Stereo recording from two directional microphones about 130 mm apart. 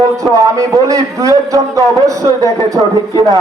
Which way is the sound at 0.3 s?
25° right (ahead or behind).